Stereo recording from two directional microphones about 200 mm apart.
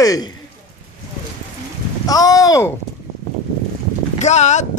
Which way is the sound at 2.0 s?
20° left (ahead or behind).